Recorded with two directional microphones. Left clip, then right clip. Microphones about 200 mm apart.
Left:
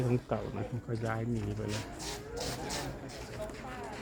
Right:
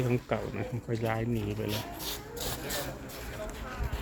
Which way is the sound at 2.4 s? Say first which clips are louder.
Right 1 dB; 40° right (ahead or behind).